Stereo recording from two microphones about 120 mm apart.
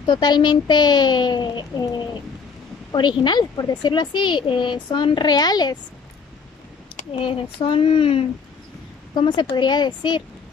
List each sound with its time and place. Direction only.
0.0 s speech: 40° left (ahead or behind)
2.9 s speech: 35° left (ahead or behind)
7.2 s speech: 45° left (ahead or behind)
9.1 s speech: 40° left (ahead or behind)